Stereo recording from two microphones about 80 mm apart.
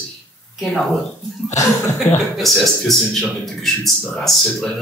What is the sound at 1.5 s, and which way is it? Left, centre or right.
Speech, left.